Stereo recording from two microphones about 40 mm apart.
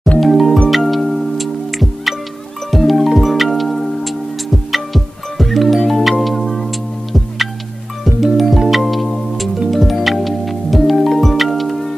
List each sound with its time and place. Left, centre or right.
0.2 s music: centre